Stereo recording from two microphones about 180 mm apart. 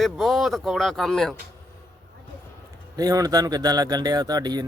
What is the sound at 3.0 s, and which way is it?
A man's voice, 20° right (ahead or behind).